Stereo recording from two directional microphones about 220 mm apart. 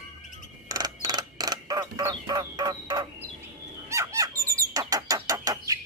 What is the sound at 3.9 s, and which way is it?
Bird, 15° right (ahead or behind).